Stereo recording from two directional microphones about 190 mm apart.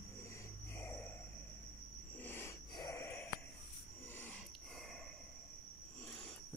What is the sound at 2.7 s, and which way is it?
Wheeze, 20° left (ahead or behind).